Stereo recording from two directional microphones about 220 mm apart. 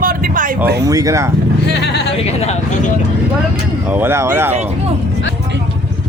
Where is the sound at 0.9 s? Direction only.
15° right (ahead or behind).